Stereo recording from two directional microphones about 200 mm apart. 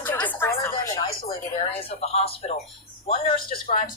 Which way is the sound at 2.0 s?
30° left (ahead or behind).